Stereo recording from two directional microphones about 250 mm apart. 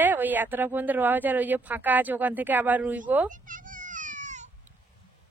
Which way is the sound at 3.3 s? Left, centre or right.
Right.